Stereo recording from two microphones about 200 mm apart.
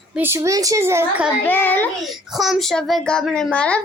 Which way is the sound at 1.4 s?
10° left (ahead or behind).